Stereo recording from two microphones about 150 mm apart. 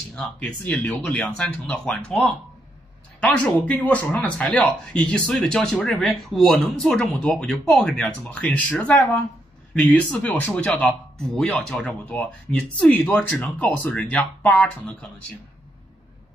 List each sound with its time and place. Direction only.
0.1 s speech: 10° left (ahead or behind)